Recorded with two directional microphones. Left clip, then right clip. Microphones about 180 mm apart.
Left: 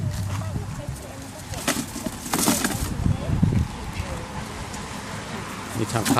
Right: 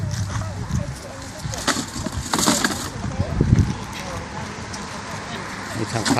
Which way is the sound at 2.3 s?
20° left (ahead or behind).